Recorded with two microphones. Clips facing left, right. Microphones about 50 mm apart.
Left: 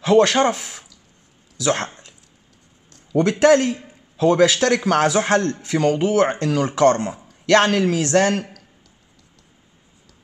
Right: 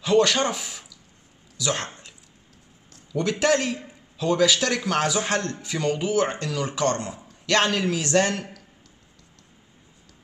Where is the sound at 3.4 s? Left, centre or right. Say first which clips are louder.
Left 8 dB; left.